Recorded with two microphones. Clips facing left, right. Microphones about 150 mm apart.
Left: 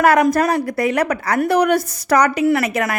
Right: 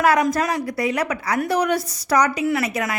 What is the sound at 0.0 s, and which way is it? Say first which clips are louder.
A woman's voice: left 4 dB; 60° left (ahead or behind).